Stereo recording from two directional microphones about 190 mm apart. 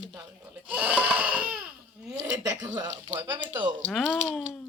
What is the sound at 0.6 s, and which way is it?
Speech, 10° right (ahead or behind).